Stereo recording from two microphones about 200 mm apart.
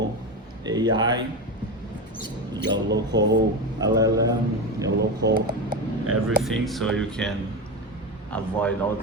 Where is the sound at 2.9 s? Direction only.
60° right (ahead or behind).